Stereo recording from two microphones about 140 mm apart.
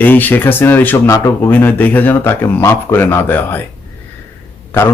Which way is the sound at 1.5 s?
15° left (ahead or behind).